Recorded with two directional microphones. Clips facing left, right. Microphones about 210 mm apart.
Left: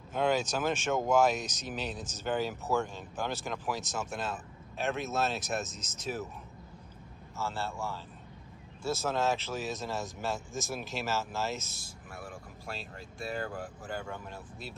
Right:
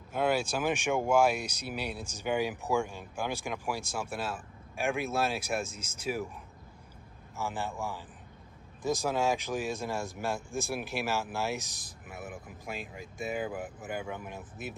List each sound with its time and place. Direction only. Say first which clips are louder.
0.1 s speech: even; 10° right (ahead or behind)
7.3 s speech: right 1 dB; 15° right (ahead or behind)